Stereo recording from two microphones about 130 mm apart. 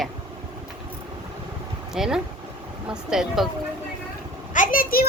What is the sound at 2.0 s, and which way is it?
Speech, 5° right (ahead or behind).